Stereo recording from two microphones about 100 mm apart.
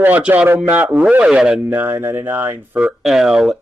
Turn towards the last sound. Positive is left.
turn(degrees=-5)  # may be behind; listen again after turning